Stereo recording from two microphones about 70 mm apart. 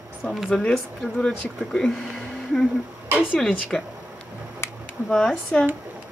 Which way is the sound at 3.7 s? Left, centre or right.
Centre.